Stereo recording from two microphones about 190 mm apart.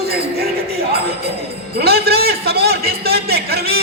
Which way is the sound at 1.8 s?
55° right (ahead or behind).